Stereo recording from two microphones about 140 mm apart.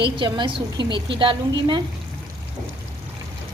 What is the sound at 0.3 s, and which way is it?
A woman's voice, 35° right (ahead or behind).